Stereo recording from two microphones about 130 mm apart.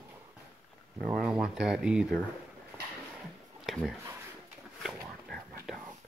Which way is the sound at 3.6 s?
Centre (ahead or behind).